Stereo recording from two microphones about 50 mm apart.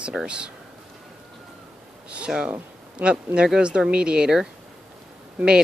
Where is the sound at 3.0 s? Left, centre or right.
Right.